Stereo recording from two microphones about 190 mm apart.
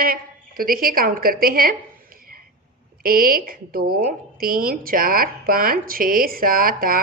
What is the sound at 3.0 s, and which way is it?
Speech, 50° right (ahead or behind).